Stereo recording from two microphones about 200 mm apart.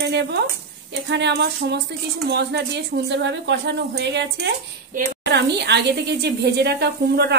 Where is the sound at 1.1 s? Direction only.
60° right (ahead or behind).